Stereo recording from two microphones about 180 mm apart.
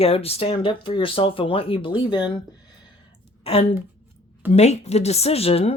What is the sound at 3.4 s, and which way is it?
A woman's voice, 35° left (ahead or behind).